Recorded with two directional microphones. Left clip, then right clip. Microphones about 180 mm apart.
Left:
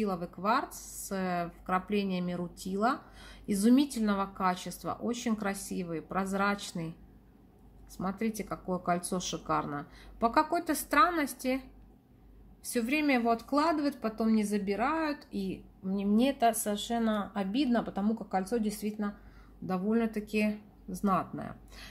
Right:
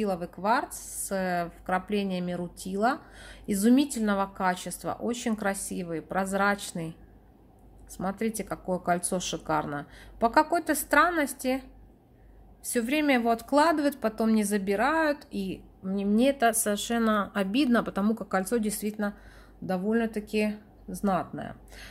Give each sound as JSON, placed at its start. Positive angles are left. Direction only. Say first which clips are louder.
{"t": 0.0, "sound": "speech", "louder": "right 4 dB", "side_deg": -20}
{"t": 8.0, "sound": "speech", "louder": "right 4 dB", "side_deg": -20}
{"t": 12.6, "sound": "a woman's voice", "louder": "right 4 dB", "side_deg": -20}
{"t": 19.6, "sound": "speech", "louder": "right 3 dB", "side_deg": -20}